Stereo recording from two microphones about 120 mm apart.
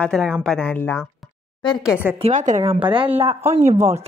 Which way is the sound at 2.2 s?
90° right.